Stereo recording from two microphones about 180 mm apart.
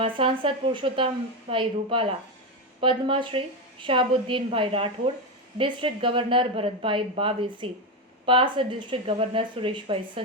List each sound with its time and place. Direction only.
0.0 s a woman's voice: 30° right (ahead or behind)